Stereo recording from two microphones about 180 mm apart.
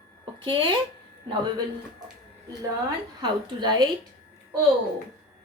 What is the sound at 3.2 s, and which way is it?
Speech, 25° right (ahead or behind).